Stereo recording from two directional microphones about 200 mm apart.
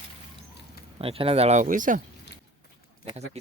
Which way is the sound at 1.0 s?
30° right (ahead or behind).